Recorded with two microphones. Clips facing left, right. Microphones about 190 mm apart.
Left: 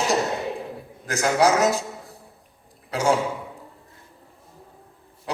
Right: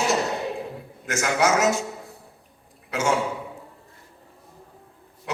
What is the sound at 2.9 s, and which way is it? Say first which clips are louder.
Speech: left 2 dB; 35° left (ahead or behind).